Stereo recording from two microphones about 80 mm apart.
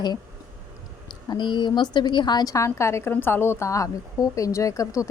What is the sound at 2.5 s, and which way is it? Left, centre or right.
A woman's voice, left.